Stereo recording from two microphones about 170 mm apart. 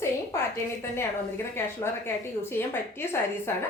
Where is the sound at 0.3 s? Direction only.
15° left (ahead or behind).